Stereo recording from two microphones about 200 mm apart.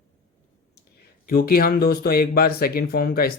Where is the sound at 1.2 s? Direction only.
45° left (ahead or behind).